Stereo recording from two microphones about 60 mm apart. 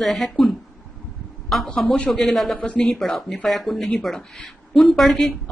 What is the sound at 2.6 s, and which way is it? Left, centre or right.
Speech, centre.